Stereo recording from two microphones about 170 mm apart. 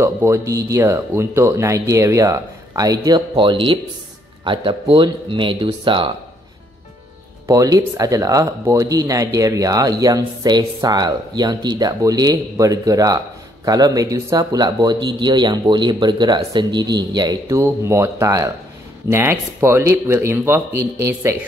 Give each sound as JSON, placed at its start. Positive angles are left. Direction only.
{"t": 0.0, "sound": "speech", "side_deg": -15}
{"t": 7.4, "sound": "speech", "side_deg": -20}